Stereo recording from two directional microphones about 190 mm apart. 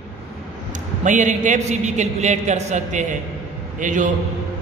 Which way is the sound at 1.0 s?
40° right (ahead or behind).